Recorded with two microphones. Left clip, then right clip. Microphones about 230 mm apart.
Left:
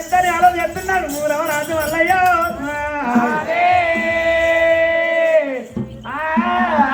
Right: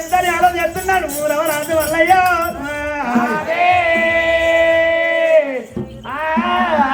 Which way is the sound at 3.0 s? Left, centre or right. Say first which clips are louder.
Even; right.